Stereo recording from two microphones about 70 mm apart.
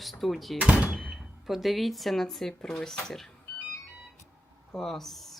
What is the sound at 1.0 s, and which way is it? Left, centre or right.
Speech, centre.